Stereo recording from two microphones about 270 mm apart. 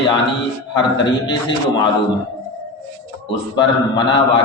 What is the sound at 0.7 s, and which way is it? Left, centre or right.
Speech, centre.